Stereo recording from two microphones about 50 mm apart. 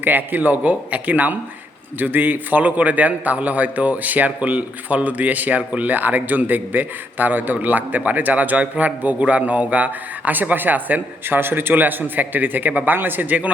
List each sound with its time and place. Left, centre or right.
0.0 s a man's voice: right
11.3 s a man's voice: right